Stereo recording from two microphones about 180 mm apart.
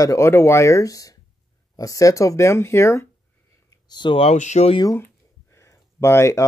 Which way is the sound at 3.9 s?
25° left (ahead or behind).